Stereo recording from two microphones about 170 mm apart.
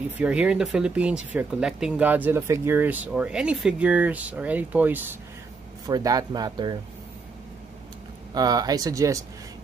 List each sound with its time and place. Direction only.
0.2 s speech: 5° right (ahead or behind)
5.9 s speech: 20° right (ahead or behind)
8.4 s speech: 20° right (ahead or behind)